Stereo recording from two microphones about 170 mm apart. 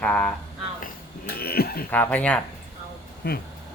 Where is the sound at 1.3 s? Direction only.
65° left (ahead or behind).